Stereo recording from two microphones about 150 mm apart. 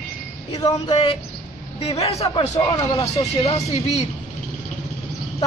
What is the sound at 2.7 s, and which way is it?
Speech, 25° left (ahead or behind).